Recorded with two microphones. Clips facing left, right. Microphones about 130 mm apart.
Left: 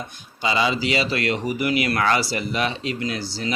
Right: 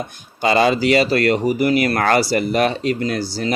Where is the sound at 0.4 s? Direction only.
55° right (ahead or behind).